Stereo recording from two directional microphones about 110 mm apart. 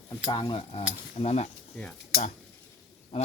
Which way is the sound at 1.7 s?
5° left (ahead or behind).